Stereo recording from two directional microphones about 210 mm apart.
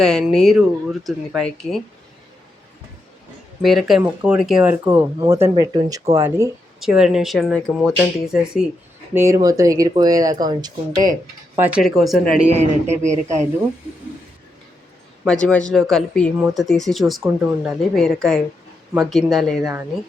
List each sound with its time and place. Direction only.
0.0 s speech: 5° left (ahead or behind)
3.6 s speech: centre (ahead or behind)
6.7 s speech: centre (ahead or behind)
9.1 s speech: 15° right (ahead or behind)
11.5 s speech: 10° right (ahead or behind)
12.5 s speech: 30° right (ahead or behind)
15.2 s speech: 5° left (ahead or behind)